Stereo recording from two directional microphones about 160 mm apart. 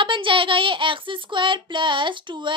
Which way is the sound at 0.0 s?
30° right (ahead or behind).